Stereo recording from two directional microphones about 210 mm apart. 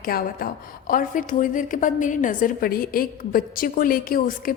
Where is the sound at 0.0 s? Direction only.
45° left (ahead or behind).